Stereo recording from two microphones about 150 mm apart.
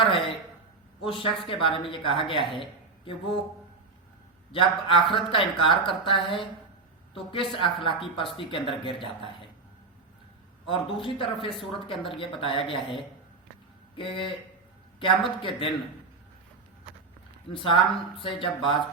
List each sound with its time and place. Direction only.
0.0 s speech: 35° left (ahead or behind)
2.6 s a sound: 35° left (ahead or behind)
4.5 s speech: 35° left (ahead or behind)
10.7 s speech: 35° left (ahead or behind)
17.5 s speech: 35° left (ahead or behind)